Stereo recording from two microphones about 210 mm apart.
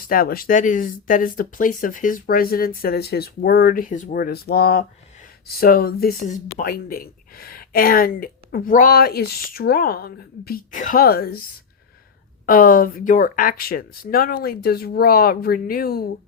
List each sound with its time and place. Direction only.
0.1 s speech: 45° left (ahead or behind)
12.5 s speech: 40° left (ahead or behind)